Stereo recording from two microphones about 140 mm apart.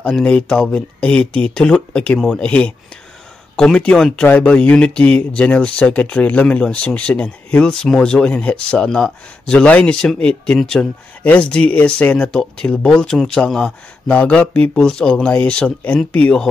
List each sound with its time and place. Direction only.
0.0 s speech: 5° left (ahead or behind)